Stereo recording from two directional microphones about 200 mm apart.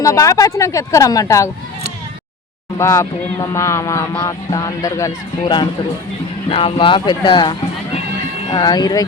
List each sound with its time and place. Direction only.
0.0 s speech: 15° left (ahead or behind)
2.7 s speech: 15° left (ahead or behind)